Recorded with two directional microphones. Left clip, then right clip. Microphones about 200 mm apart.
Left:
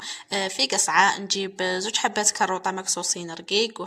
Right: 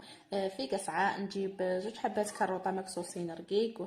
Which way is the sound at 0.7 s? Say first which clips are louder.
Left 13 dB; 25° left (ahead or behind).